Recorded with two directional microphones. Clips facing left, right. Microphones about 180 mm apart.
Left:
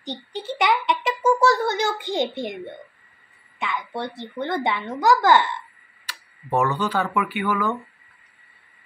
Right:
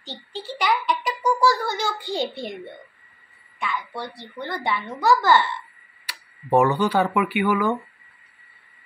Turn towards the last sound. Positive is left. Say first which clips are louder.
# right 3 dB
turn(degrees=-15)  # may be behind; listen again after turning